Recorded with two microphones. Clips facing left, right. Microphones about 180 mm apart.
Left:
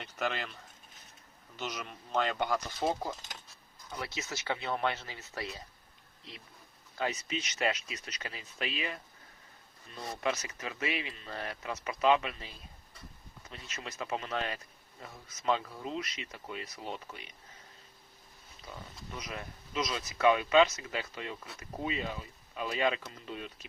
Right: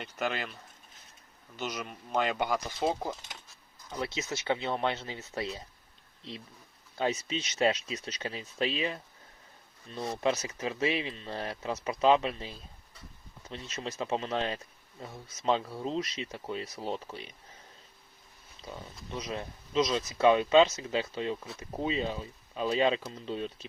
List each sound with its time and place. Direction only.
0.0 s speech: 5° right (ahead or behind)
1.5 s speech: centre (ahead or behind); by 5.6 s 25° right (ahead or behind)
7.0 s speech: 30° right (ahead or behind)
19.1 s speech: 30° right (ahead or behind)